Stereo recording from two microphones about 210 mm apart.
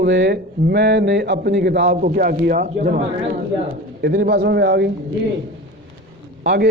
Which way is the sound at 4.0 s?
50° right (ahead or behind).